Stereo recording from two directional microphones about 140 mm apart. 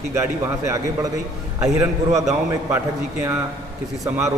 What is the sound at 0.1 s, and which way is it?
A man's voice, 20° right (ahead or behind).